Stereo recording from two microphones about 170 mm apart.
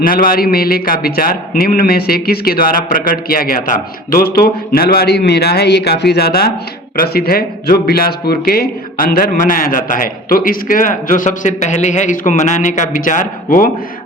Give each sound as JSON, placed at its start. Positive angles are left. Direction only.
{"t": 0.0, "sound": "speech", "side_deg": 55}